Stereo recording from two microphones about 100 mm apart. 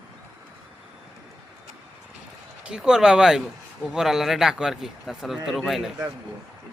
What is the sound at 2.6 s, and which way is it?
A man's voice, 10° right (ahead or behind).